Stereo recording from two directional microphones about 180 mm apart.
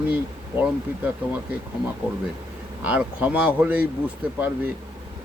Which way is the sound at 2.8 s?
5° right (ahead or behind).